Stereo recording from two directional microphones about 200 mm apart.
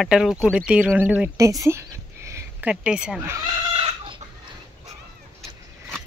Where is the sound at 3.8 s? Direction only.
25° right (ahead or behind).